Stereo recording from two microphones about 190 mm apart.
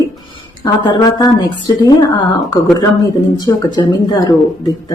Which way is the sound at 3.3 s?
20° left (ahead or behind).